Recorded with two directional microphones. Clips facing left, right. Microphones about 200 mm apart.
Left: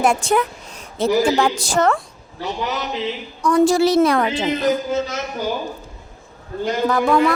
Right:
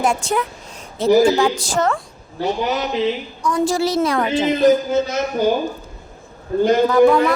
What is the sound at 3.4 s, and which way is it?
Speech, 65° left (ahead or behind).